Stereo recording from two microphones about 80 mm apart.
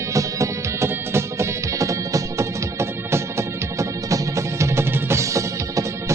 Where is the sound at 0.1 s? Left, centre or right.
Right.